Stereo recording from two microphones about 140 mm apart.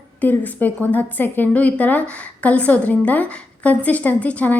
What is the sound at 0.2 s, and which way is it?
A woman's voice, 10° left (ahead or behind).